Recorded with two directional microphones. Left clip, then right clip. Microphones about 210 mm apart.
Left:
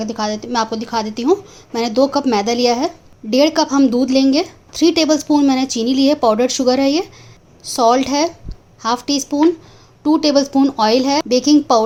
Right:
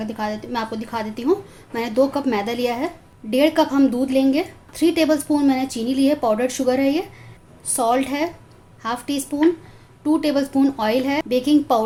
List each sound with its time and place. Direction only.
0.0 s a woman's voice: 35° left (ahead or behind)